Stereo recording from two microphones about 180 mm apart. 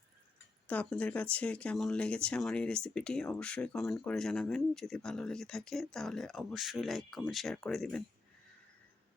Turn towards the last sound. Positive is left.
turn(degrees=5)  # may be behind; listen again after turning